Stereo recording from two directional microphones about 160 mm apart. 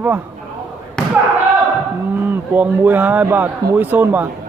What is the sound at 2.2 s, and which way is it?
Speech, 10° right (ahead or behind).